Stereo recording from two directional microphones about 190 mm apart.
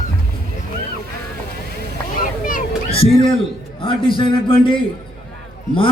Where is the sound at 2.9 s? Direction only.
30° left (ahead or behind).